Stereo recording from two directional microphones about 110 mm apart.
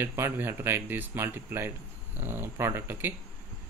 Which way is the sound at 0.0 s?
20° right (ahead or behind).